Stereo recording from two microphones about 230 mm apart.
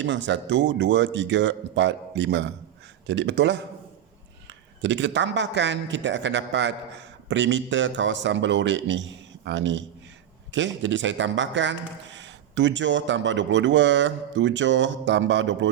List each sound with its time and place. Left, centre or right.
0.0 s speech: right